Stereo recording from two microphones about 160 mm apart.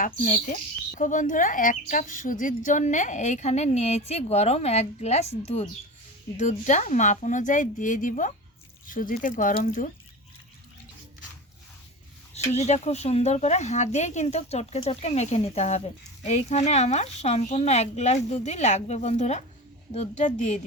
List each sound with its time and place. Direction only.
0.2 s speech: 60° left (ahead or behind)
12.5 s speech: 45° left (ahead or behind)